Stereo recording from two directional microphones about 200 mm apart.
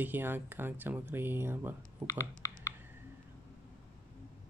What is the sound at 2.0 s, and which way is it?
Typing, 15° left (ahead or behind).